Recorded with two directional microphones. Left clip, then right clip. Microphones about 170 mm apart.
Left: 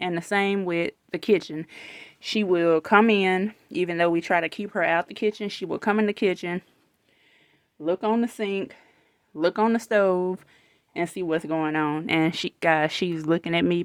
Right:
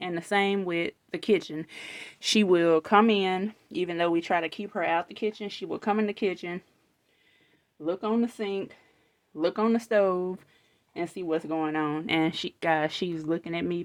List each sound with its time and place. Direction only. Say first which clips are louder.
0.0 s speech: left 2 dB; 30° left (ahead or behind)
2.0 s speech: right 2 dB; 15° right (ahead or behind)
2.8 s speech: left 3 dB; 30° left (ahead or behind); by 6.7 s 45° left (ahead or behind)
7.8 s speech: left 4 dB; 45° left (ahead or behind)
10.9 s speech: left 4 dB; 40° left (ahead or behind)